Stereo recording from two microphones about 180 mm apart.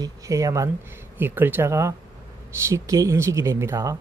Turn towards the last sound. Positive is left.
turn(degrees=-15)  # may be behind; listen again after turning